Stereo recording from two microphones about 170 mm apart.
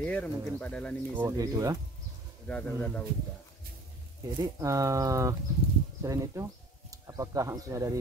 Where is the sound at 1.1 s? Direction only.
15° right (ahead or behind).